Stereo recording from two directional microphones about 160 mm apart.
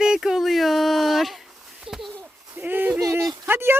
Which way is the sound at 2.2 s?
15° right (ahead or behind).